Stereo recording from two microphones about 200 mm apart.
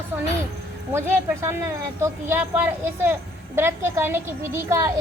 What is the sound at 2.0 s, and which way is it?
Speech, 10° right (ahead or behind).